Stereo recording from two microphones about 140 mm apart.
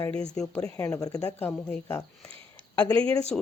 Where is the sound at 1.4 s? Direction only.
10° left (ahead or behind).